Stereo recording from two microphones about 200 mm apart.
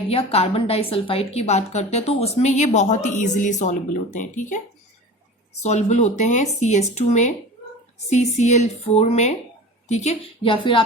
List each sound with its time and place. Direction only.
0.1 s a woman's voice: 30° left (ahead or behind)
5.6 s a woman's voice: 35° left (ahead or behind)